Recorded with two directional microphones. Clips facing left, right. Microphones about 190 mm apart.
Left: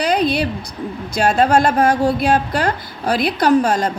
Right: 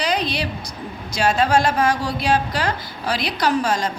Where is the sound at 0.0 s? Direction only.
55° left (ahead or behind).